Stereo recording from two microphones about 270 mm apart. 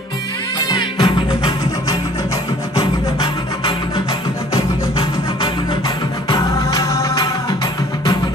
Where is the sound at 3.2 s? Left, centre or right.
Centre.